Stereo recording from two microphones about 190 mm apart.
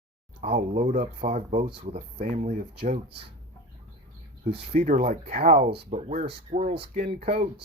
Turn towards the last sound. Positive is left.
turn(degrees=-30)  # may be behind; listen again after turning